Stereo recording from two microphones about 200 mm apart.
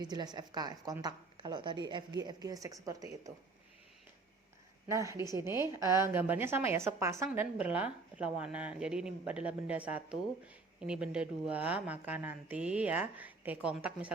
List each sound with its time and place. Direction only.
0.0 s a woman's voice: 20° right (ahead or behind)
4.9 s speech: 15° right (ahead or behind)